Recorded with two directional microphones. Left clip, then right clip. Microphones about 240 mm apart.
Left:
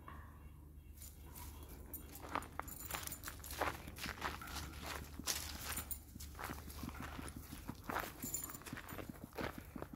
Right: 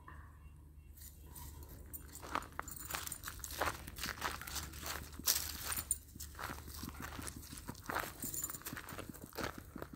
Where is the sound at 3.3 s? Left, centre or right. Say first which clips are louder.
Right 2 dB; right.